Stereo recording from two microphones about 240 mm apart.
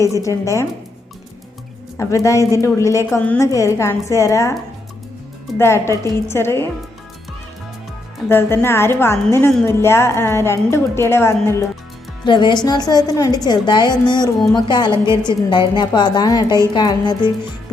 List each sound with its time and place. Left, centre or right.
0.2 s a woman's voice: centre
2.0 s a woman's voice: centre
5.5 s a woman's voice: centre
8.3 s a woman's voice: centre